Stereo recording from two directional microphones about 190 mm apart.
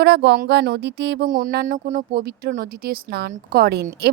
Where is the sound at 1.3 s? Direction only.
45° right (ahead or behind).